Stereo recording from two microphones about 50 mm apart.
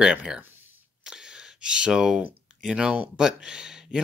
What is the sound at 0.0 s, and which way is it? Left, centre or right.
Speech, centre.